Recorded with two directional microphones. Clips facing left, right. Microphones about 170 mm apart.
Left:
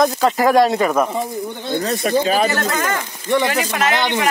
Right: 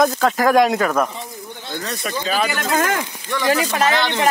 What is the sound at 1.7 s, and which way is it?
Speech, 50° left (ahead or behind).